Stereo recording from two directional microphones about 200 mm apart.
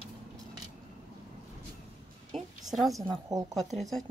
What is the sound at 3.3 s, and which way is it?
Speech, 15° right (ahead or behind).